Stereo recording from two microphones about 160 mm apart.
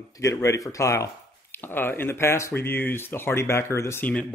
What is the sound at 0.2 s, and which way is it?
Speech, 20° left (ahead or behind).